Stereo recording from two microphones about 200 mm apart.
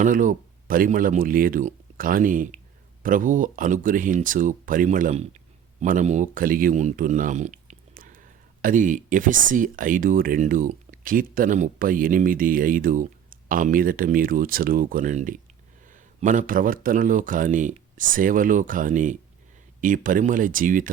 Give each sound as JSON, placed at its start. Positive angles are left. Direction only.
{"t": 0.0, "sound": "speech", "side_deg": -40}